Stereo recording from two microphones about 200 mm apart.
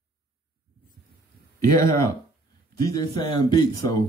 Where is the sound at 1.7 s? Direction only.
15° left (ahead or behind).